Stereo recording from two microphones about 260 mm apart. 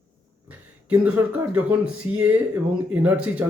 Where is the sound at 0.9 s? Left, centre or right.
Centre.